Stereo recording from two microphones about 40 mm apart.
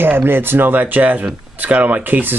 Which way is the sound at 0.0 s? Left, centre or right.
Right.